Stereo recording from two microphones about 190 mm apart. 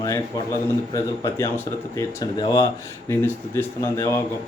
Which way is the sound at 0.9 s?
15° left (ahead or behind).